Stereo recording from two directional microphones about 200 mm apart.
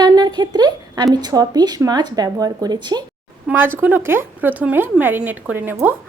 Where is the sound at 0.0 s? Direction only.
20° right (ahead or behind).